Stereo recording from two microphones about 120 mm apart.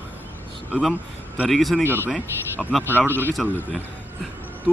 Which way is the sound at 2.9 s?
15° left (ahead or behind).